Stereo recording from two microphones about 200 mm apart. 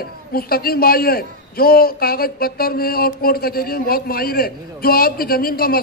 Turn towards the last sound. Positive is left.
turn(degrees=50)  # may be behind; listen again after turning